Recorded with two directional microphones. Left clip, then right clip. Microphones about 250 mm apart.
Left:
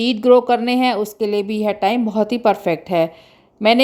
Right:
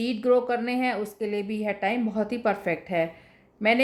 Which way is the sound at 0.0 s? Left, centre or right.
Left.